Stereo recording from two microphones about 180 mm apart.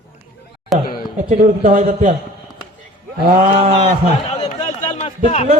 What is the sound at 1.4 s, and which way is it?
Speech, 50° right (ahead or behind).